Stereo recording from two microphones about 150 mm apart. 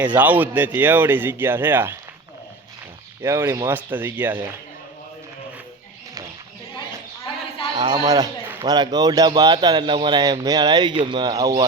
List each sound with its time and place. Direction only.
0.0 s speech: 10° right (ahead or behind)
3.2 s speech: 20° right (ahead or behind)
7.7 s a man's voice: 30° right (ahead or behind)